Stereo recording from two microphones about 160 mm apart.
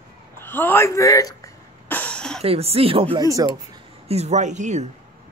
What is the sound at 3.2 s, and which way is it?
Speech, 20° right (ahead or behind).